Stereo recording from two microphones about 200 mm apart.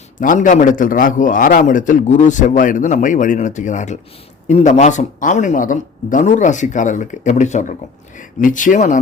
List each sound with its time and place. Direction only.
0.2 s speech: 40° left (ahead or behind)